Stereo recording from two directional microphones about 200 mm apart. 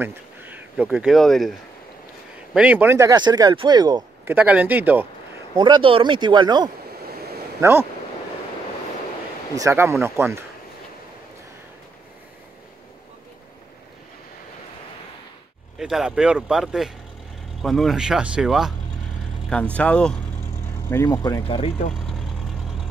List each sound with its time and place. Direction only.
0.0 s speech: 10° right (ahead or behind)
4.4 s speech: 5° right (ahead or behind)
5.6 s speech: 25° right (ahead or behind)
9.6 s speech: 15° right (ahead or behind)
15.8 s speech: centre (ahead or behind)
20.9 s speech: 15° left (ahead or behind); by 21.9 s 30° left (ahead or behind)